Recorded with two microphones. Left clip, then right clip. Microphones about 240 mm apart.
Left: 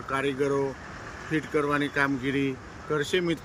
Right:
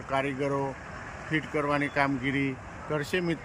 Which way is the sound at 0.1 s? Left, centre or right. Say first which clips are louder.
Left 2 dB; centre.